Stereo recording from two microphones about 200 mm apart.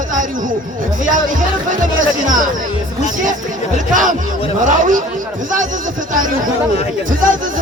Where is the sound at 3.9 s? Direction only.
40° right (ahead or behind).